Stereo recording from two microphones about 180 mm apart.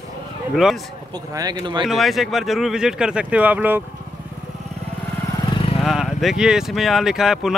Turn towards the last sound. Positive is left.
turn(degrees=0)  # may be behind; listen again after turning